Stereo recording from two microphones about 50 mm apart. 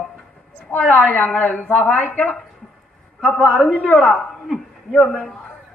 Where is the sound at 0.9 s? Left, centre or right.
Left.